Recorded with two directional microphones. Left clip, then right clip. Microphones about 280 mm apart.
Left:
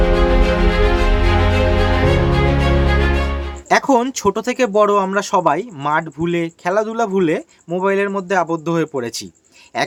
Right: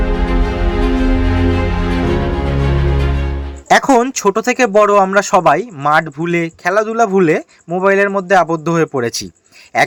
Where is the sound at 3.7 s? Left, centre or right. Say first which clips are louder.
Right 4 dB; centre.